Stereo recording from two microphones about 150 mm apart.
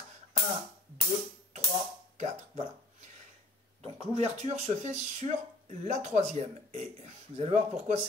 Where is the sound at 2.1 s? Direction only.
45° right (ahead or behind).